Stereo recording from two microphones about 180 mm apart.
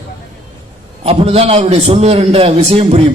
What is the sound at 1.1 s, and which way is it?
A man's voice, 35° right (ahead or behind).